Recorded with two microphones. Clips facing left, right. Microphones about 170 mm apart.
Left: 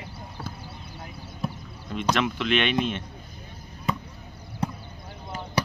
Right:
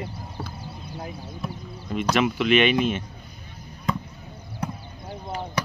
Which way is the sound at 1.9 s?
5° right (ahead or behind).